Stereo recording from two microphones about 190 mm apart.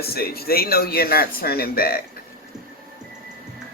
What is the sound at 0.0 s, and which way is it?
Speech, 55° left (ahead or behind).